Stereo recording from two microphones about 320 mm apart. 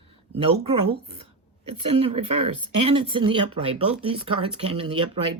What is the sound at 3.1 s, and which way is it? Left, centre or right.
Speech, centre.